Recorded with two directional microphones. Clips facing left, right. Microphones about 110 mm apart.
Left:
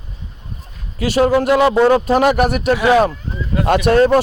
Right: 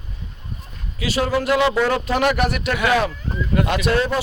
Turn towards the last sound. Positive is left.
turn(degrees=45)  # may be behind; listen again after turning